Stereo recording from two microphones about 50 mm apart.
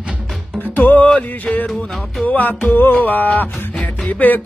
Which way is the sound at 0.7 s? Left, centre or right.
Left.